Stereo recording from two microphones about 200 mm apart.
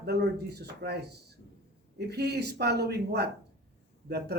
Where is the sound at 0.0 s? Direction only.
55° right (ahead or behind).